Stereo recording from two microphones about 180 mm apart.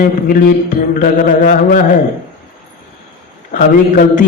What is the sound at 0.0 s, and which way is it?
A man's voice, 55° left (ahead or behind).